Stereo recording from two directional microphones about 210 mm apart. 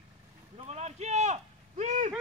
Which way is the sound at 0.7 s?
30° right (ahead or behind).